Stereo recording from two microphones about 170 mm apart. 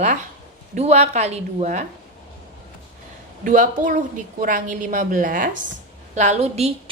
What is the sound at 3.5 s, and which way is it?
A woman's voice, 50° right (ahead or behind).